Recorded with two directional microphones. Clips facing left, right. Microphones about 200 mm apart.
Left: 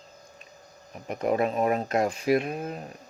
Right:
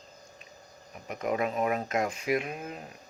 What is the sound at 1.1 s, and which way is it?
Speech, 35° left (ahead or behind).